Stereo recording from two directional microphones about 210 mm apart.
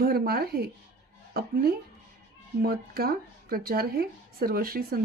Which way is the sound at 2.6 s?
45° right (ahead or behind).